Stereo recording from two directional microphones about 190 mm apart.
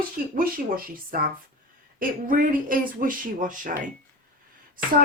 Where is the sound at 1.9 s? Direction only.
45° right (ahead or behind).